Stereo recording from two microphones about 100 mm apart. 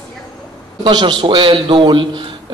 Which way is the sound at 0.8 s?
50° right (ahead or behind).